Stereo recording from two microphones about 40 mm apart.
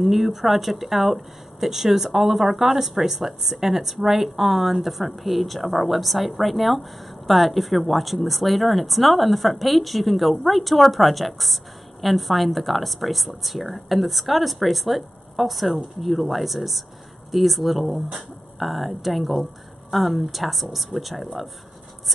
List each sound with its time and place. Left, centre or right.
0.0 s speech: centre